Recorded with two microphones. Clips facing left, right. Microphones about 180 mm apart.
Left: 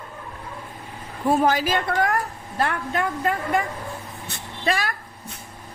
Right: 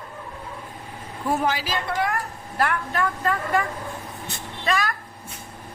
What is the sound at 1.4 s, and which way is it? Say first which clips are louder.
Speech: left 4 dB; 50° left (ahead or behind).